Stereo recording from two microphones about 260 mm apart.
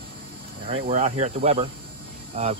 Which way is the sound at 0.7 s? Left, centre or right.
Right.